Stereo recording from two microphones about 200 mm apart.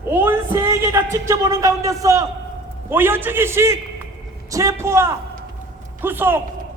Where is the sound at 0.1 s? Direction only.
10° right (ahead or behind).